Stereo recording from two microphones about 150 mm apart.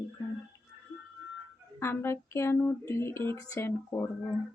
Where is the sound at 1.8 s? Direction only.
15° left (ahead or behind).